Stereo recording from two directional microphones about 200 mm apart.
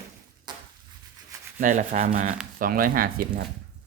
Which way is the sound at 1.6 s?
40° right (ahead or behind).